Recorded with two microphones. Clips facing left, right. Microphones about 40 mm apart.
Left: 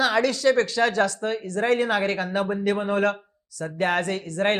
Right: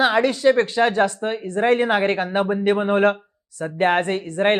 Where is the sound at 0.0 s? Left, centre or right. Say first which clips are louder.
Right 4 dB; right.